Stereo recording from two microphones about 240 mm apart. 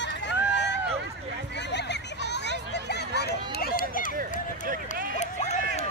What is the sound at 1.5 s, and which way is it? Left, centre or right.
Hubbub, left.